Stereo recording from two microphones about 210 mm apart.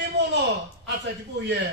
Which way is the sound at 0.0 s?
55° right (ahead or behind).